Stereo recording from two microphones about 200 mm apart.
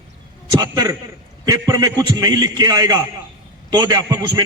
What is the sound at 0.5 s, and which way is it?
A man's voice, 20° right (ahead or behind).